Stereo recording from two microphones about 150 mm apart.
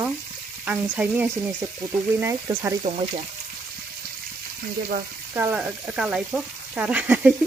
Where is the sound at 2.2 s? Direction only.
20° right (ahead or behind).